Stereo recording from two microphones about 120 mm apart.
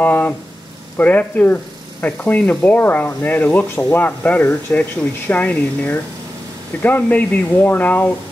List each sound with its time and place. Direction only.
0.0 s speech: 15° left (ahead or behind)